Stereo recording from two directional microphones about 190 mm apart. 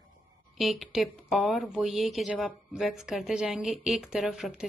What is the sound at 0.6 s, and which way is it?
A woman's voice, centre (ahead or behind).